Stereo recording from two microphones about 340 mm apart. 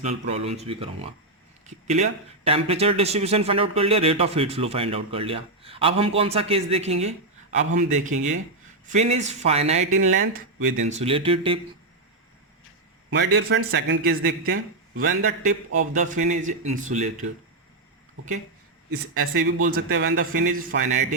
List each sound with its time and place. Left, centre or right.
0.0 s a man's voice: centre
13.1 s a man's voice: right
18.9 s a man's voice: right